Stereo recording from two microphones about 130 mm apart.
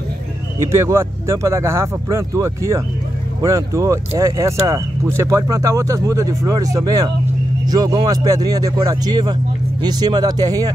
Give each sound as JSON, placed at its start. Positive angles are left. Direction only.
{"t": 0.6, "sound": "speech", "side_deg": -20}